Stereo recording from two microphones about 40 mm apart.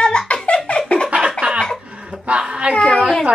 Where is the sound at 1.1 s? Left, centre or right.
Right.